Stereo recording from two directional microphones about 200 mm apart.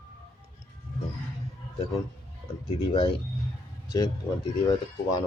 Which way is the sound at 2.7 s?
30° left (ahead or behind).